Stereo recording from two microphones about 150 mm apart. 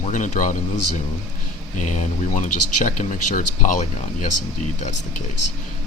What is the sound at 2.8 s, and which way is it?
Speech, 55° left (ahead or behind).